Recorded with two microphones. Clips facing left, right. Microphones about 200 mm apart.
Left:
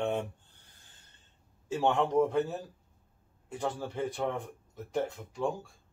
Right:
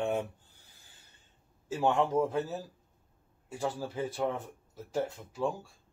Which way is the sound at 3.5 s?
5° right (ahead or behind).